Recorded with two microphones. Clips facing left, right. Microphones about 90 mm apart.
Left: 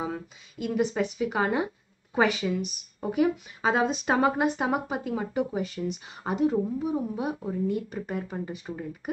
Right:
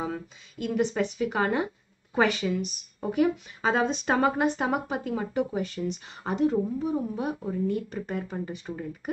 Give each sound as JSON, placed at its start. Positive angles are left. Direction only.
{"t": 0.0, "sound": "speech", "side_deg": 5}